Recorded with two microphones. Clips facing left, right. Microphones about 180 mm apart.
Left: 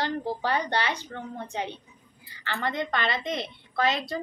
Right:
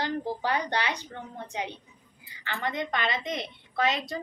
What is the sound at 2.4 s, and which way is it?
A woman's voice, 15° right (ahead or behind).